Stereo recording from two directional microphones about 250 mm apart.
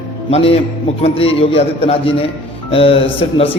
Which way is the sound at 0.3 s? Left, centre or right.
Left.